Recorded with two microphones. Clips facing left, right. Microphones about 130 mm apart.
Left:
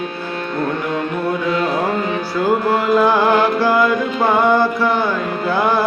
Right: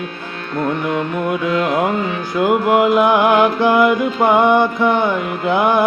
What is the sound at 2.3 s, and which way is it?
Music, 20° right (ahead or behind).